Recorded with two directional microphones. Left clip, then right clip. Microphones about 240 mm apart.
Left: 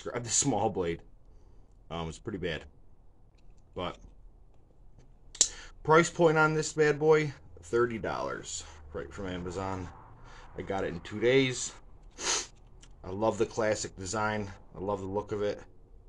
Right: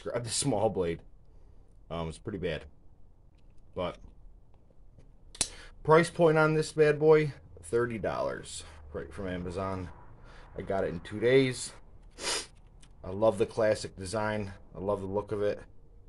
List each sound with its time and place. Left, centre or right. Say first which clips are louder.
0.0 s speech: left 1 dB; centre
3.7 s speech: right 2 dB; centre
5.3 s speech: left 6 dB; centre